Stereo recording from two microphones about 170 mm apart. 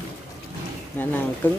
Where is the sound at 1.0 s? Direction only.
10° left (ahead or behind).